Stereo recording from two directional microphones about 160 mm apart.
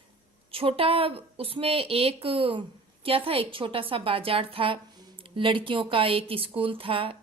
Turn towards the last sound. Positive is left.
turn(degrees=-35)  # may be behind; listen again after turning